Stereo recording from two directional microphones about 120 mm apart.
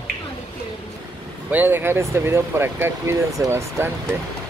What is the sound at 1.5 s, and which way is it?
Speech, 15° right (ahead or behind).